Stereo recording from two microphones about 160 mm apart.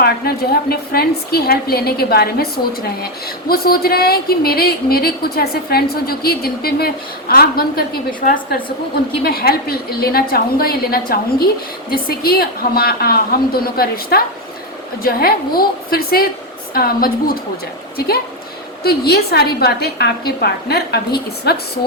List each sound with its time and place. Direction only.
0.0 s a woman's voice: 75° left (ahead or behind)
3.5 s a woman's voice: 70° left (ahead or behind)
9.2 s a woman's voice: 75° left (ahead or behind)
18.8 s a woman's voice: 80° left